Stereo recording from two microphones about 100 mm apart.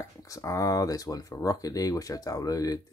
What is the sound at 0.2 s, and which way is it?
Speech, 30° left (ahead or behind).